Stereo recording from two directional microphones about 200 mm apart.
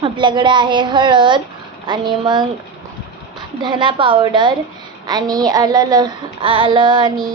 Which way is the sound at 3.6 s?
25° right (ahead or behind).